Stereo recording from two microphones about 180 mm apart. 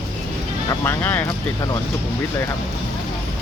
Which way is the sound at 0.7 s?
15° left (ahead or behind).